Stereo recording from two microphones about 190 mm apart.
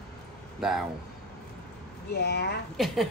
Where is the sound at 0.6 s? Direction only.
Centre (ahead or behind).